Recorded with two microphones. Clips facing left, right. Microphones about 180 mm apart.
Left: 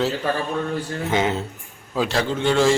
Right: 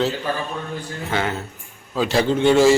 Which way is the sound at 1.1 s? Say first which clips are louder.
Left 2 dB; 20° left (ahead or behind).